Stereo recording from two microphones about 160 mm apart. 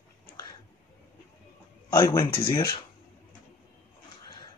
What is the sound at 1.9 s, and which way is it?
Speech, 25° left (ahead or behind).